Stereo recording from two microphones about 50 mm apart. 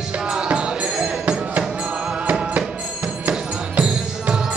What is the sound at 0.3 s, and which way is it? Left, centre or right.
Music, centre.